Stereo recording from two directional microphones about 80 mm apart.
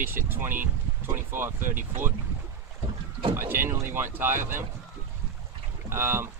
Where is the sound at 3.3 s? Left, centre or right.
Right.